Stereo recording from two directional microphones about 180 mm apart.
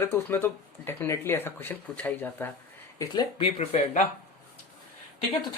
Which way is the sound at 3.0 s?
25° left (ahead or behind).